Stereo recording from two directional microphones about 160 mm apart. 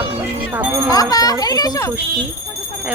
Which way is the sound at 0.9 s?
25° left (ahead or behind).